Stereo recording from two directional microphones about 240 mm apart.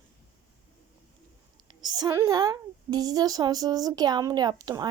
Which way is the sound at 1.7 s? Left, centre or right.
Centre.